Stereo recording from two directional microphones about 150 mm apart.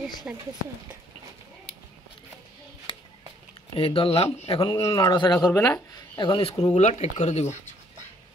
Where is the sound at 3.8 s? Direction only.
40° left (ahead or behind).